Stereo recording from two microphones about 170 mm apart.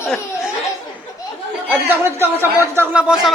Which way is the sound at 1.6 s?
10° right (ahead or behind).